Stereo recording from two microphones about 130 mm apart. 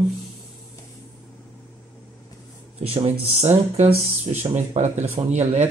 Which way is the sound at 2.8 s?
50° right (ahead or behind).